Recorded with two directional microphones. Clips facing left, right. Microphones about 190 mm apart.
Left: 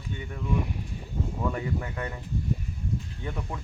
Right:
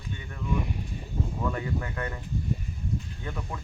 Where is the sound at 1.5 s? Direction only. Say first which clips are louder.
Left 1 dB; 15° left (ahead or behind).